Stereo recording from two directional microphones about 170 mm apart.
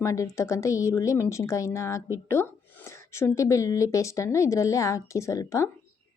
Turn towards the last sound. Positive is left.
turn(degrees=20)  # may be behind; listen again after turning